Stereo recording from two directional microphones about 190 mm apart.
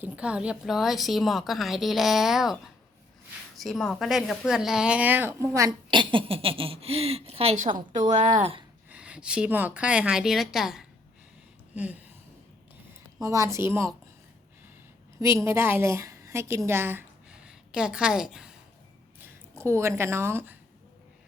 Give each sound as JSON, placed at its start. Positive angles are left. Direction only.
{"t": 0.0, "sound": "a woman's voice", "side_deg": -5}
{"t": 3.6, "sound": "a woman's voice", "side_deg": 0}
{"t": 8.9, "sound": "a woman's voice", "side_deg": -5}
{"t": 11.7, "sound": "a sound", "side_deg": -10}
{"t": 13.2, "sound": "a woman's voice", "side_deg": -15}
{"t": 15.2, "sound": "a woman's voice", "side_deg": -15}
{"t": 19.2, "sound": "speech", "side_deg": -15}